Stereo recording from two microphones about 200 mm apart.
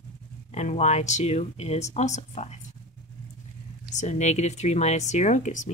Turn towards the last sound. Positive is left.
turn(degrees=35)  # may be behind; listen again after turning